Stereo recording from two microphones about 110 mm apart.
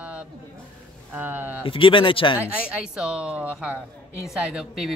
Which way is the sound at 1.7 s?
50° left (ahead or behind).